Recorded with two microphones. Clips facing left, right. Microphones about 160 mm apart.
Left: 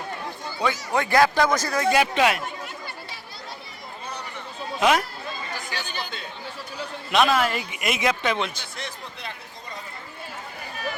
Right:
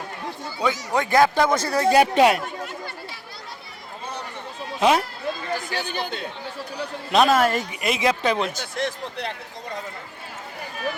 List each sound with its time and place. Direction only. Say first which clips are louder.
0.6 s speech: right 1 dB; 15° right (ahead or behind); by 2.4 s 40° right (ahead or behind)
4.8 s a man's voice: right 2 dB; 30° right (ahead or behind)
5.7 s speech: right 5 dB; 55° right (ahead or behind)
6.7 s a man's voice: right 2 dB; 35° right (ahead or behind)